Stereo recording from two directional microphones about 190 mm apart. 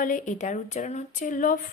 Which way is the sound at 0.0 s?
40° left (ahead or behind).